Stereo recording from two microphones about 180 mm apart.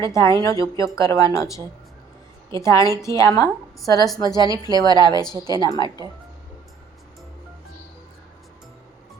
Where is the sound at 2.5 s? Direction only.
15° left (ahead or behind).